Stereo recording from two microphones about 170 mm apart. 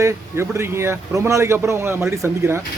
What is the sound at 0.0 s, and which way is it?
Speech, 15° right (ahead or behind).